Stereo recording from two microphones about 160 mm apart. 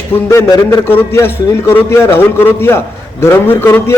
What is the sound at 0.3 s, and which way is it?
A man's voice, 15° left (ahead or behind).